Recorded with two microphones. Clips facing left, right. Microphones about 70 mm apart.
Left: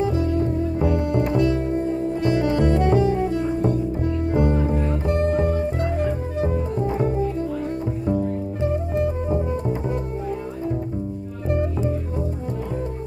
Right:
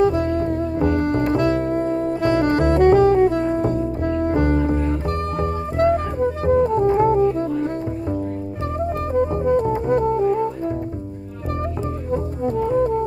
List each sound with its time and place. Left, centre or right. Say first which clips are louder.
0.0 s music: right 4 dB; right
6.4 s music: right 8 dB; right
9.3 s music: right 5 dB; right